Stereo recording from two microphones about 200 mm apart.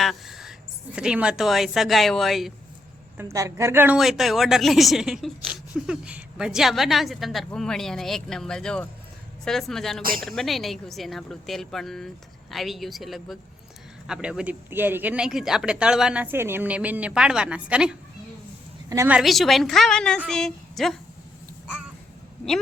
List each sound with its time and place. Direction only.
0.0 s a sound: centre (ahead or behind)
0.9 s speech: 5° right (ahead or behind)
3.2 s speech: 15° right (ahead or behind); by 10.0 s centre (ahead or behind)
10.0 s a woman's voice: 45° right (ahead or behind)
10.2 s speech: centre (ahead or behind)